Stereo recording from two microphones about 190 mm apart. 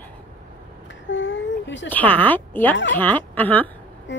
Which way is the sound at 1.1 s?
90° left.